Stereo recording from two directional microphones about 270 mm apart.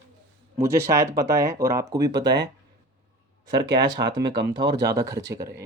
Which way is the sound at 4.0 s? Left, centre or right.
Right.